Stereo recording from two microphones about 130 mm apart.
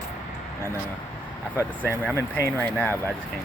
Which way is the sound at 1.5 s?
15° right (ahead or behind).